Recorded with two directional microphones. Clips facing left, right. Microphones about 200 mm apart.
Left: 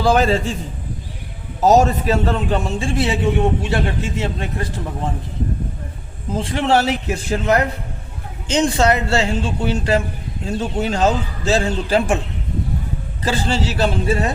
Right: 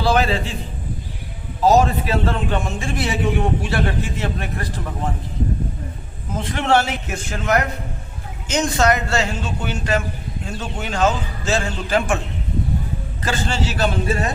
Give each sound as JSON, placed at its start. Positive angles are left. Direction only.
{"t": 0.0, "sound": "a man's voice", "side_deg": 40}
{"t": 1.6, "sound": "a man's voice", "side_deg": 40}
{"t": 6.3, "sound": "a man's voice", "side_deg": 30}
{"t": 13.2, "sound": "a man's voice", "side_deg": 35}